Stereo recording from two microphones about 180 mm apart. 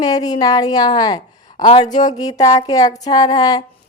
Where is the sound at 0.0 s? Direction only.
20° left (ahead or behind).